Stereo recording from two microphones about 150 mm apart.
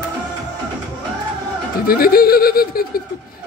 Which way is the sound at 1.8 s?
80° left.